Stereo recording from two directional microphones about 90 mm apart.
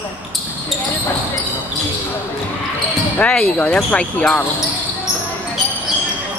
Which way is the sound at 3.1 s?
15° left (ahead or behind).